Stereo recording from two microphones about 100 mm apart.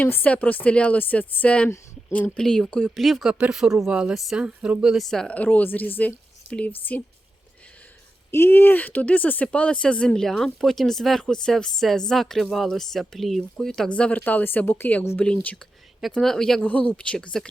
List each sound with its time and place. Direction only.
0.0 s speech: 20° left (ahead or behind)
8.3 s speech: 25° left (ahead or behind)